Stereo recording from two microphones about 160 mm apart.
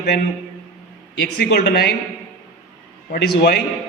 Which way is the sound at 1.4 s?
85° left.